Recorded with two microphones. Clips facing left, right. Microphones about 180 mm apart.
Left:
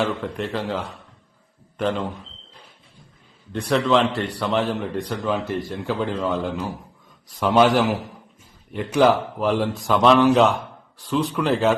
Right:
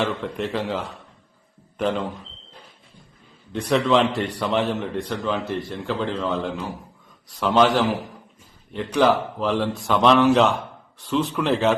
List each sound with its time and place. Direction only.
0.0 s a man's voice: centre (ahead or behind)
3.5 s a man's voice: centre (ahead or behind)